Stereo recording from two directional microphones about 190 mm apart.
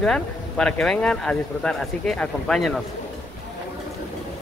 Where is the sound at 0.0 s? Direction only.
5° left (ahead or behind).